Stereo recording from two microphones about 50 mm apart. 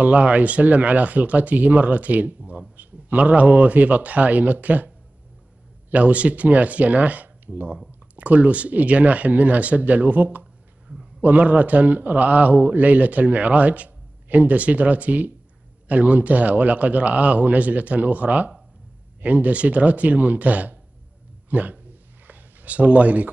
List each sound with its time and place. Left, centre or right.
0.0 s a man's voice: right
10.9 s a sound: centre
11.2 s a man's voice: right